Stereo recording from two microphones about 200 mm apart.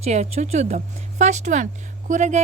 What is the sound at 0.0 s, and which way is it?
Speech, 35° right (ahead or behind).